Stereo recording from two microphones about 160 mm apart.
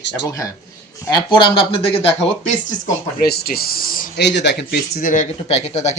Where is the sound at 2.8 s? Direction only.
75° left (ahead or behind).